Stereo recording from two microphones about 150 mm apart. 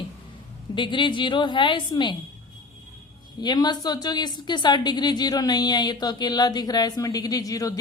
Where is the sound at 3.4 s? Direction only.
30° left (ahead or behind).